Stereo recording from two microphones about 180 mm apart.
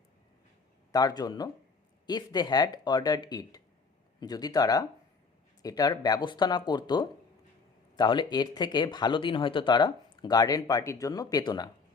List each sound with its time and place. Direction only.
0.9 s speech: 20° left (ahead or behind)